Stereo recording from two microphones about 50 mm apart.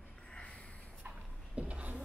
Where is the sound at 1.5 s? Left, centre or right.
Right.